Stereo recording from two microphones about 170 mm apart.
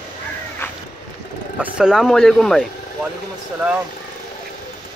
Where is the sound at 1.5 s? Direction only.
5° right (ahead or behind).